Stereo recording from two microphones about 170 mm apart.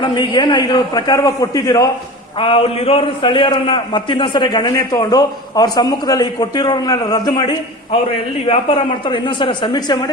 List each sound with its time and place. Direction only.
0.0 s a man's voice: 30° left (ahead or behind)
2.4 s a man's voice: 35° left (ahead or behind)